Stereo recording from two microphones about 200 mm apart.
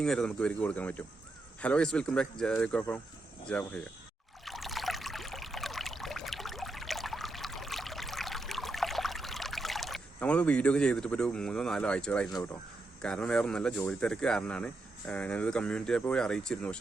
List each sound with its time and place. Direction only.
0.0 s speech: 5° left (ahead or behind)
4.4 s pour: centre (ahead or behind)
13.0 s speech: 5° left (ahead or behind)